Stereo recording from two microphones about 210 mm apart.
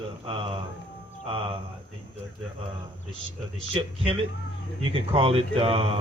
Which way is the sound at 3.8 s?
25° right (ahead or behind).